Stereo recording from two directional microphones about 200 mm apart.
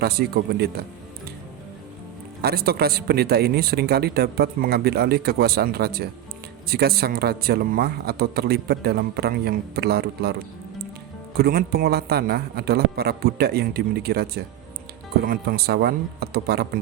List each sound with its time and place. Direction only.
0.0 s a man's voice: 50° right (ahead or behind)
2.4 s a man's voice: 50° right (ahead or behind)